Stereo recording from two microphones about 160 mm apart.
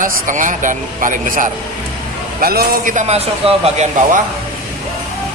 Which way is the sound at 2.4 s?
70° right (ahead or behind).